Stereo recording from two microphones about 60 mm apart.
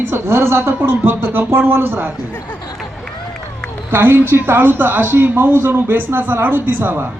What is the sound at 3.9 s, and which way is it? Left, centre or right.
A woman's voice, right.